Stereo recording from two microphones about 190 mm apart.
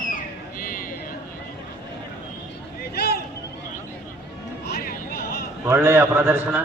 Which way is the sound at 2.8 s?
60° left (ahead or behind).